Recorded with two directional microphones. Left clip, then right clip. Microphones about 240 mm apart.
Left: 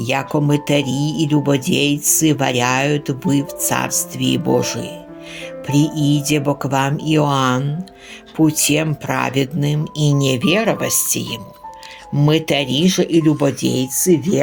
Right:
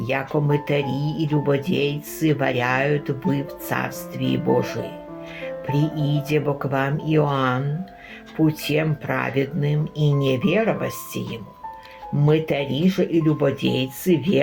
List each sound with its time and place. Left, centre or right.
0.0 s speech: left